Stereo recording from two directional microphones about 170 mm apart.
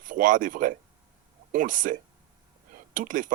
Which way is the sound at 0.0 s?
50° right (ahead or behind).